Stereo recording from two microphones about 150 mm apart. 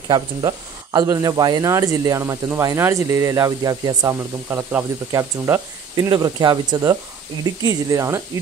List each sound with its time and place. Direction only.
0.1 s speech: 30° right (ahead or behind)
5.9 s speech: 30° right (ahead or behind)